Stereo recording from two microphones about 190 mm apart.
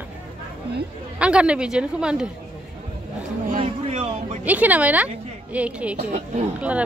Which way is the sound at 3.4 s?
40° right (ahead or behind).